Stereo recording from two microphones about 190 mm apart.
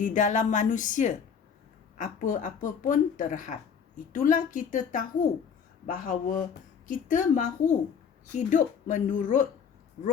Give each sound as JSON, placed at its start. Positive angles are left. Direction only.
{"t": 0.0, "sound": "a woman's voice", "side_deg": 40}